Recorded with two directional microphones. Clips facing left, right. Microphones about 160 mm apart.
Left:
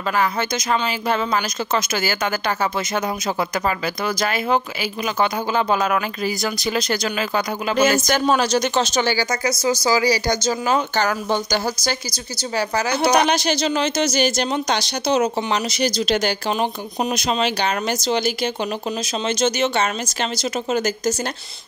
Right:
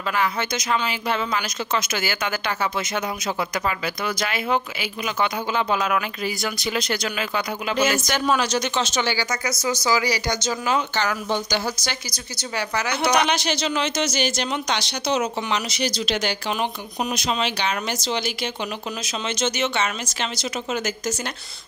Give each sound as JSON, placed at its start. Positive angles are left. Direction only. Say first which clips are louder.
{"t": 0.0, "sound": "speech", "louder": "left 3 dB", "side_deg": 40}